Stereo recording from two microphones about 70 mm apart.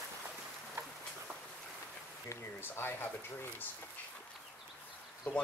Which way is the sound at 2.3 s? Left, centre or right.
Left.